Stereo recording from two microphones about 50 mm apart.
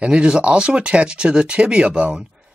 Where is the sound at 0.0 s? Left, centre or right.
Centre.